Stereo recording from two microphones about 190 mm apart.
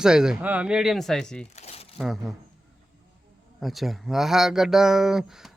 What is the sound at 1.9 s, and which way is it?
Speech, centre (ahead or behind).